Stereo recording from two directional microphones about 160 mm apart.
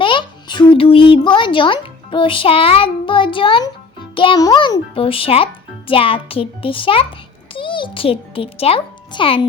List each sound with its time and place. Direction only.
0.0 s a child's voice: 30° left (ahead or behind)